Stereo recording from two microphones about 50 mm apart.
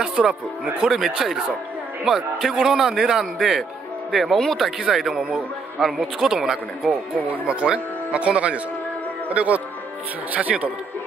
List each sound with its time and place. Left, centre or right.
0.0 s a man's voice: centre
0.8 s a man's voice: centre
4.1 s a man's voice: centre
7.4 s speech: centre